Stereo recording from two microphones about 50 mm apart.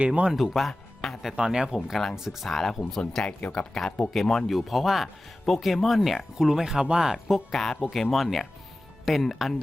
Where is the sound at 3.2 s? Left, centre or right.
Centre.